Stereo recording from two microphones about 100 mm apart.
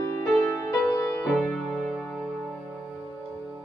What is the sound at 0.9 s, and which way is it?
Music, 30° left (ahead or behind).